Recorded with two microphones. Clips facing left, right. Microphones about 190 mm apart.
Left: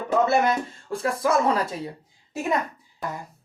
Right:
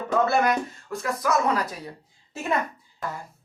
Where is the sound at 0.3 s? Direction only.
25° left (ahead or behind).